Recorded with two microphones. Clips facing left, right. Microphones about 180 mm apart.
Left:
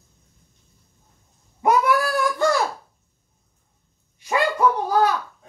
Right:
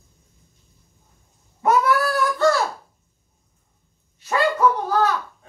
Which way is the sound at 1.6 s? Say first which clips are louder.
Even; 15° left (ahead or behind).